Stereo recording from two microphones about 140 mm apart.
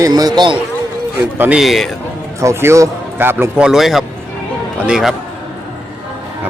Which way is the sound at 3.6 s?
Centre (ahead or behind).